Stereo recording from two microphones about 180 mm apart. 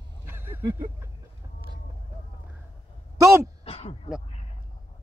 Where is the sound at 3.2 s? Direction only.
15° right (ahead or behind).